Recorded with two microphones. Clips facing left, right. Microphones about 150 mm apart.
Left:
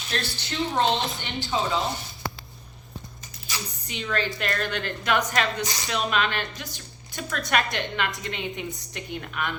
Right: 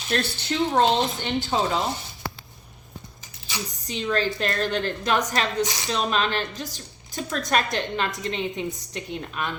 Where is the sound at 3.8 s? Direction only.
35° right (ahead or behind).